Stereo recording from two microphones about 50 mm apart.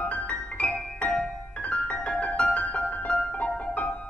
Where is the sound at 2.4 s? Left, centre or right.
Left.